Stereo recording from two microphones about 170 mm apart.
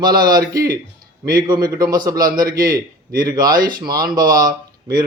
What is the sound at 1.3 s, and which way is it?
A man's voice, 25° right (ahead or behind).